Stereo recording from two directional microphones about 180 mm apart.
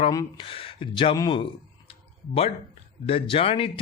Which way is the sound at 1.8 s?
35° left (ahead or behind).